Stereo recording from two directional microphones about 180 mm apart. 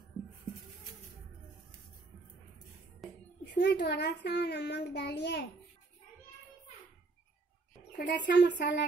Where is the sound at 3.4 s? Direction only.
70° left (ahead or behind).